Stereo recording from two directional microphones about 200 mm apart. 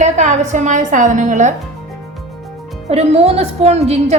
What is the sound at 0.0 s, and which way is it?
A woman's voice, 35° right (ahead or behind).